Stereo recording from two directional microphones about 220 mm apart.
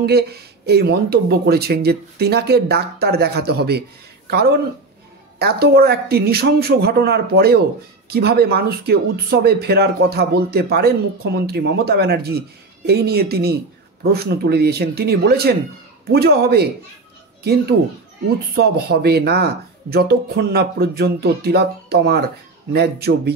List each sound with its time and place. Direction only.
0.0 s a child's voice: 45° right (ahead or behind)